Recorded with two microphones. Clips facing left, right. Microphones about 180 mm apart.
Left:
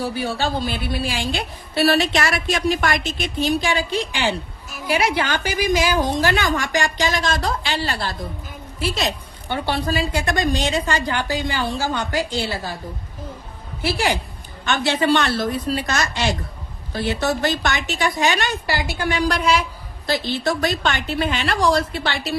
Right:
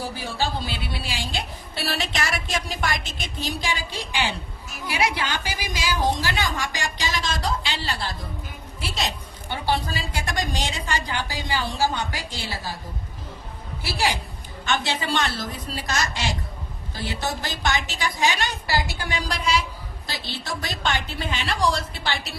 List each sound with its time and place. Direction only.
0.0 s a woman's voice: 55° left (ahead or behind)
9.0 s a woman's voice: 60° left (ahead or behind)
13.8 s a woman's voice: 55° left (ahead or behind)